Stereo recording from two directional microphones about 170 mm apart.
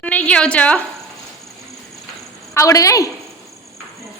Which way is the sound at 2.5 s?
20° left (ahead or behind).